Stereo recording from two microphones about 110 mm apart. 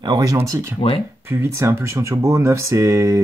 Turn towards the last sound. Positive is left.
turn(degrees=-30)  # may be behind; listen again after turning